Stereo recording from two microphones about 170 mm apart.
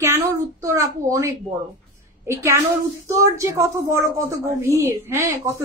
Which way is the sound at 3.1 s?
20° right (ahead or behind).